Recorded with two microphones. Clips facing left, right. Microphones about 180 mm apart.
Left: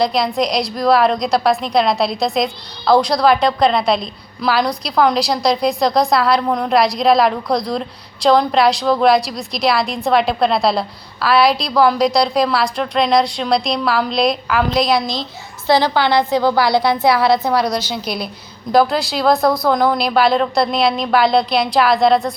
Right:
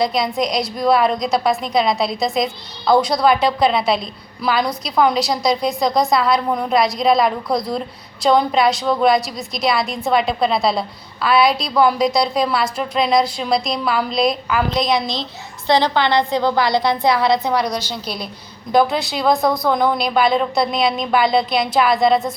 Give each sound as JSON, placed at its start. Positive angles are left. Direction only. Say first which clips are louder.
{"t": 0.0, "sound": "a woman's voice", "louder": "left 2 dB", "side_deg": 0}